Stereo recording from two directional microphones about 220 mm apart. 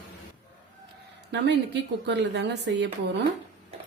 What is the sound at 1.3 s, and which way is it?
Speech, 55° right (ahead or behind).